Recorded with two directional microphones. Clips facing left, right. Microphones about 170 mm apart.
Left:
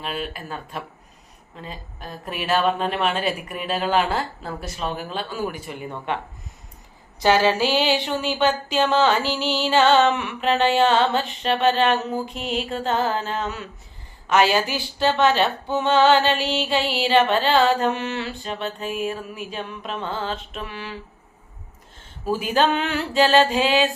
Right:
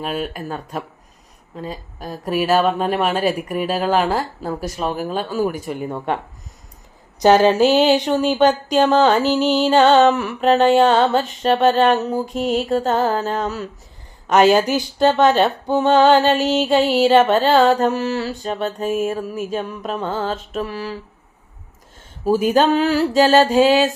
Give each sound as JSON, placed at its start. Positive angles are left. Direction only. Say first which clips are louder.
{"t": 0.0, "sound": "music", "louder": "right 5 dB", "side_deg": -45}
{"t": 1.6, "sound": "speech", "louder": "right 6 dB", "side_deg": -40}
{"t": 2.6, "sound": "speech", "louder": "right 3 dB", "side_deg": -5}
{"t": 3.1, "sound": "music", "louder": "right 5 dB", "side_deg": -45}
{"t": 3.9, "sound": "speech", "louder": "right 2 dB", "side_deg": -40}
{"t": 4.9, "sound": "music", "louder": "right 7 dB", "side_deg": -45}
{"t": 7.2, "sound": "speech", "louder": "right 6 dB", "side_deg": -45}
{"t": 15.7, "sound": "music", "louder": "right 4 dB", "side_deg": -40}
{"t": 22.2, "sound": "speech", "louder": "right 5 dB", "side_deg": -45}